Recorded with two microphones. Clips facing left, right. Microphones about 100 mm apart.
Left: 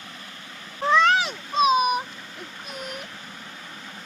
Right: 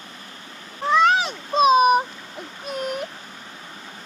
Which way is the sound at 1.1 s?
25° right (ahead or behind).